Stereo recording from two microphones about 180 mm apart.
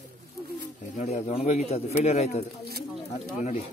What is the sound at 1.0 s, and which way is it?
A man's voice, 40° left (ahead or behind).